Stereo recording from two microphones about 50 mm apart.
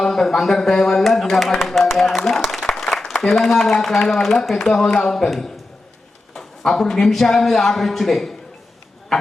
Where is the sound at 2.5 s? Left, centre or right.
Centre.